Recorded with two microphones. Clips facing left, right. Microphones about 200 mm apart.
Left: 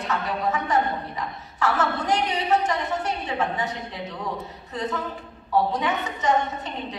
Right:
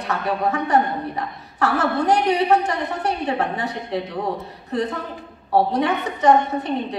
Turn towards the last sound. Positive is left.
turn(degrees=-60)  # may be behind; listen again after turning